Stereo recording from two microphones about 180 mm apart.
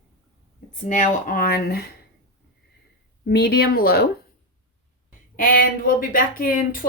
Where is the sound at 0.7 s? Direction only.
45° left (ahead or behind); by 1.9 s 60° left (ahead or behind).